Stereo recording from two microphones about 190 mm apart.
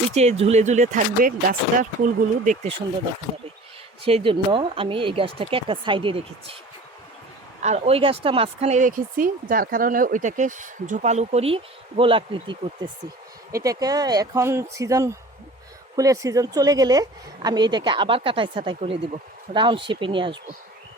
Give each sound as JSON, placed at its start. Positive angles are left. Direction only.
{"t": 0.1, "sound": "speech", "side_deg": -35}
{"t": 4.0, "sound": "a woman's voice", "side_deg": -30}
{"t": 7.6, "sound": "a woman's voice", "side_deg": -35}